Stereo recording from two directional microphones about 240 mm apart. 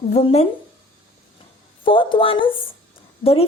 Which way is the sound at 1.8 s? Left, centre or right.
Left.